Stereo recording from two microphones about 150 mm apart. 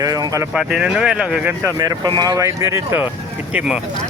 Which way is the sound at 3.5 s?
5° right (ahead or behind).